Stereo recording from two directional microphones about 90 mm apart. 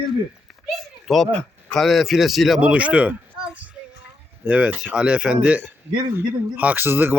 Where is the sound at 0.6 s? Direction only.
Centre (ahead or behind).